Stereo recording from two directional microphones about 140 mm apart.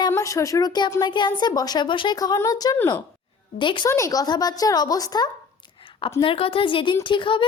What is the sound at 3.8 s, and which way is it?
A woman's voice, 20° left (ahead or behind).